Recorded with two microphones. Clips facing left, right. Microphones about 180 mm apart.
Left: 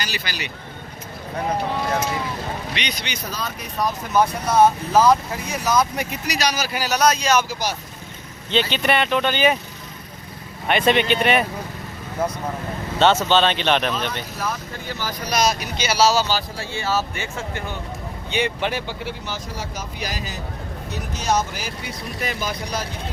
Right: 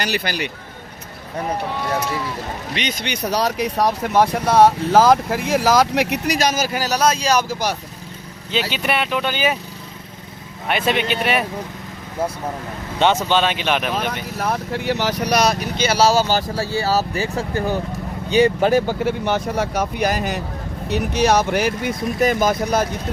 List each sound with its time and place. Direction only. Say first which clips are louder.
0.0 s speech: right 7 dB; 60° right (ahead or behind)
2.7 s speech: right 4 dB; 45° right (ahead or behind)
7.0 s speech: even; 30° right (ahead or behind)
7.4 s speech: right 4 dB; 60° right (ahead or behind)
8.7 s speech: left 1 dB; 5° right (ahead or behind)
10.7 s speech: left 2 dB; 5° right (ahead or behind)
13.0 s speech: even; 15° right (ahead or behind)
14.3 s speech: right 6 dB; 65° right (ahead or behind); by 19.1 s 45° right (ahead or behind)
19.2 s speech: right 10 dB; 60° right (ahead or behind)
22.2 s speech: right 10 dB; 45° right (ahead or behind)